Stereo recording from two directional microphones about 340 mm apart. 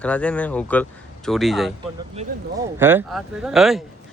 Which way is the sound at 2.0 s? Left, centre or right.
Centre.